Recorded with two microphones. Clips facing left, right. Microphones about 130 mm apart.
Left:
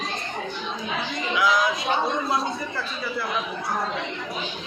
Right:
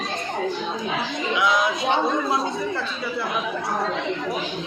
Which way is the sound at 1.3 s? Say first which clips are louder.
Even; 25° right (ahead or behind).